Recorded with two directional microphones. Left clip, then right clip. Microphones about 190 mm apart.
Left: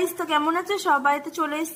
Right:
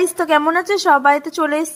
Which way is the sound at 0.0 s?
30° right (ahead or behind).